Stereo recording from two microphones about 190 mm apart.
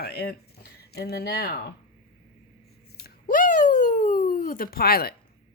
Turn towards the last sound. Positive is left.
turn(degrees=55)  # may be behind; listen again after turning